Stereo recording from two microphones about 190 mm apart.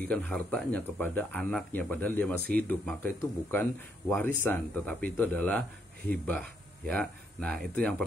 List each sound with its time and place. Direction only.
0.0 s speech: 5° left (ahead or behind)